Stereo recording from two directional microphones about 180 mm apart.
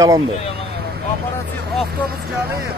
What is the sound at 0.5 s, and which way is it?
Vehicle, 60° right (ahead or behind).